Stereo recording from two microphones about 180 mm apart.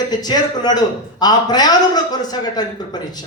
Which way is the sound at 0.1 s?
20° left (ahead or behind).